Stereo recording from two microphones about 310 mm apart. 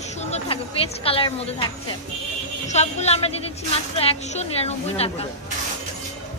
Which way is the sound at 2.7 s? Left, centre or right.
Left.